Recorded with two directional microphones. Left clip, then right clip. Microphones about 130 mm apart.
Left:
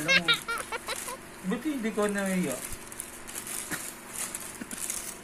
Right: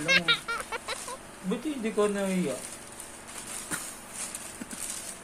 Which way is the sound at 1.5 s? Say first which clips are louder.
Even; 35° right (ahead or behind).